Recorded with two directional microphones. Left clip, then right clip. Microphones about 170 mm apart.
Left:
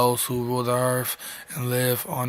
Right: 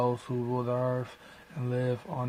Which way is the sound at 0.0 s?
20° left (ahead or behind).